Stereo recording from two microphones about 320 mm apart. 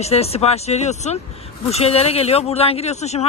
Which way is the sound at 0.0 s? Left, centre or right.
Centre.